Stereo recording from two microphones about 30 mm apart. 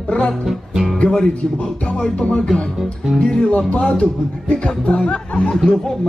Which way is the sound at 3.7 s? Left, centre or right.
Left.